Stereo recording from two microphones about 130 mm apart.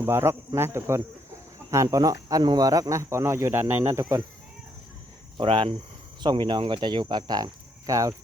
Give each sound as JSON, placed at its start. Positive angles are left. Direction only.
{"t": 0.0, "sound": "speech", "side_deg": -20}
{"t": 5.4, "sound": "speech", "side_deg": -45}